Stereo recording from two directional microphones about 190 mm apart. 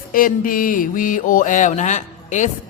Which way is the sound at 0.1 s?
45° left (ahead or behind).